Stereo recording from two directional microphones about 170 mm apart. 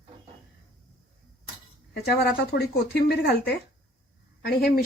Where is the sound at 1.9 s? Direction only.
70° left (ahead or behind).